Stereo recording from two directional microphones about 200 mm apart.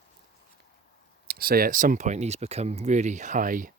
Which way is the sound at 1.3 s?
50° right (ahead or behind).